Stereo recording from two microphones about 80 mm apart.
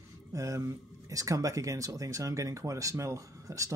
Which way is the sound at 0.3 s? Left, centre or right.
Right.